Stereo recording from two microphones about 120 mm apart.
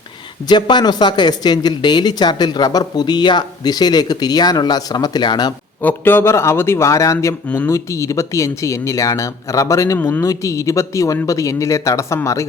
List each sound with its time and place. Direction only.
0.4 s speech: 35° left (ahead or behind)
5.8 s speech: 20° left (ahead or behind)
7.4 s speech: 15° left (ahead or behind)
7.7 s speech: 25° left (ahead or behind)